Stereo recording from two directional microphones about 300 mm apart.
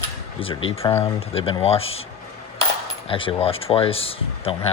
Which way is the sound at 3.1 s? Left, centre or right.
Centre.